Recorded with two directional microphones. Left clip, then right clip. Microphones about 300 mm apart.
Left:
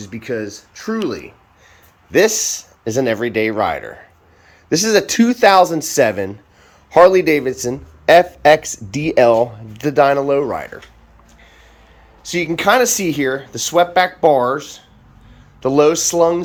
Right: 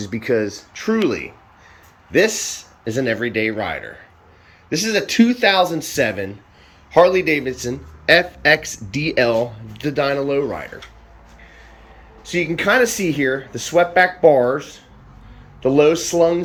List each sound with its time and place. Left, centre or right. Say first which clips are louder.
0.0 s speech: right 4 dB; centre
2.8 s speech: left 3 dB; centre
12.3 s speech: left 3 dB; centre